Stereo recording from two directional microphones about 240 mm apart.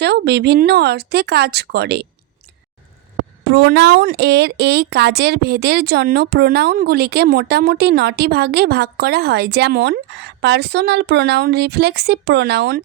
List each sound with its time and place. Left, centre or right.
0.0 s speech: right
3.4 s speech: right